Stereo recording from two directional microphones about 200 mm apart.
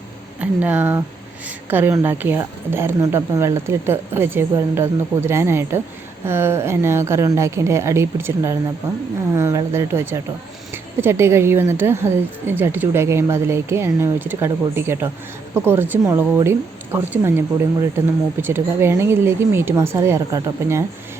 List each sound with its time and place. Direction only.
0.3 s speech: 10° right (ahead or behind)